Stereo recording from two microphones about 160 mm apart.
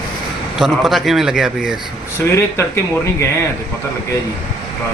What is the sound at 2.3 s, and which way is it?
Speech, 15° left (ahead or behind).